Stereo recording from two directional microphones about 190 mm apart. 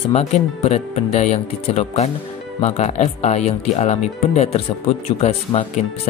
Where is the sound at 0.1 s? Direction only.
35° left (ahead or behind).